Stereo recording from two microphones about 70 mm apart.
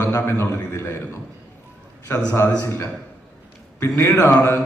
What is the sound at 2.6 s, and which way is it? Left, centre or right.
A man's voice, left.